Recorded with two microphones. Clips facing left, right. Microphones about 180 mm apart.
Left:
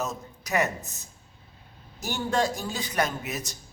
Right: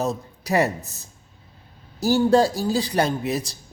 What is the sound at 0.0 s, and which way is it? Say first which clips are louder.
A man's voice: right 7 dB; 35° right (ahead or behind).